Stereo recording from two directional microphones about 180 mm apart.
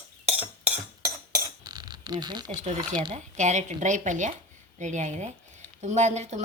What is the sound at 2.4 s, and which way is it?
A woman's voice, 40° right (ahead or behind).